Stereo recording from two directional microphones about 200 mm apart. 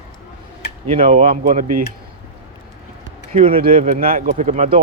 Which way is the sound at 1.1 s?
35° right (ahead or behind).